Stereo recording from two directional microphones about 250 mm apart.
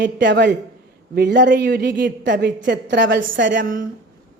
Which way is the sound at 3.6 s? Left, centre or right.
Right.